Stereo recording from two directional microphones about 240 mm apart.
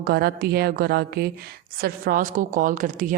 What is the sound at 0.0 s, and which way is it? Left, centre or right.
A woman's voice, right.